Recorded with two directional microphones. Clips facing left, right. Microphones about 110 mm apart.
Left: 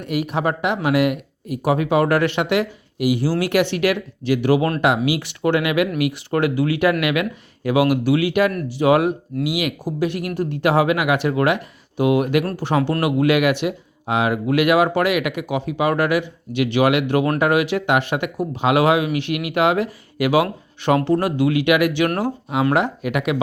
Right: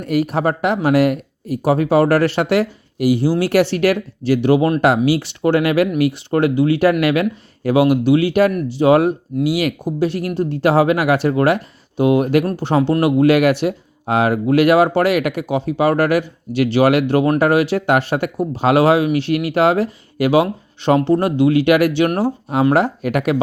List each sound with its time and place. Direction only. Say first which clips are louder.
0.0 s speech: right 4 dB; 40° right (ahead or behind)
3.2 s speech: right 4 dB; 25° right (ahead or behind)
3.5 s speech: right 3 dB; 35° right (ahead or behind)